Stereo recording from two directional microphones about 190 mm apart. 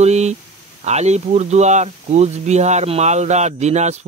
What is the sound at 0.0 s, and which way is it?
Speech, 35° right (ahead or behind).